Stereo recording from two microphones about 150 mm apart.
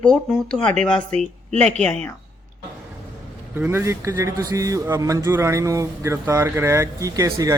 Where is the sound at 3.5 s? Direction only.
15° right (ahead or behind).